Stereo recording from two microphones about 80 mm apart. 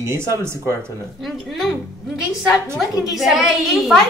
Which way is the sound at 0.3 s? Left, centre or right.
Right.